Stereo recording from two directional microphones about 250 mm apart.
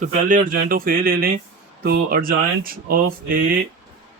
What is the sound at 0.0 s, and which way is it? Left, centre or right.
Speech, right.